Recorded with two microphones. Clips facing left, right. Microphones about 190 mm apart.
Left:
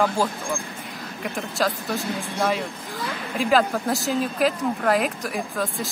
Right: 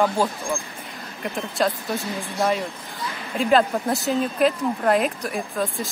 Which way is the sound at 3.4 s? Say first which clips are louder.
Right 2 dB; centre (ahead or behind).